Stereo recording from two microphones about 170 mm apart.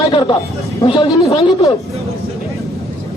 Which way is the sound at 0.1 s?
25° left (ahead or behind).